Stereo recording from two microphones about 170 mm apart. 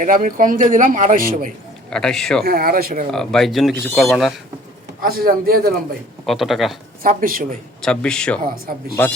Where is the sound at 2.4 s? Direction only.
65° right (ahead or behind).